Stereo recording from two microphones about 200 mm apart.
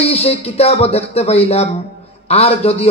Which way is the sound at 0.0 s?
30° left (ahead or behind).